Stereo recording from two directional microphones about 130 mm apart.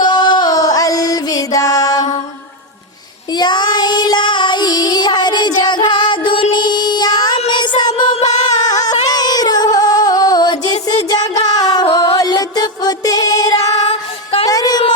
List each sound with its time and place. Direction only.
0.0 s music: 35° left (ahead or behind)
3.3 s child singing: 35° left (ahead or behind)
7.6 s music: 35° left (ahead or behind)
8.5 s a sound: 30° left (ahead or behind)
10.9 s music: 30° left (ahead or behind)
14.4 s a sound: 30° left (ahead or behind)